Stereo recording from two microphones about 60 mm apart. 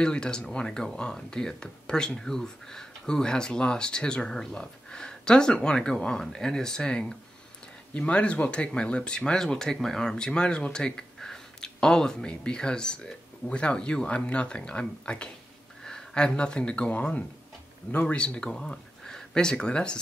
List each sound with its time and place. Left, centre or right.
0.0 s speech: centre